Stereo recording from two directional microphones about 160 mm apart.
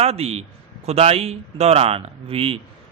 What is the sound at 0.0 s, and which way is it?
A man's voice, 40° right (ahead or behind).